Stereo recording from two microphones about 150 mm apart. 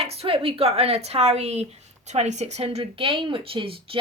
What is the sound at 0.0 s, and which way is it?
Speech, 40° right (ahead or behind).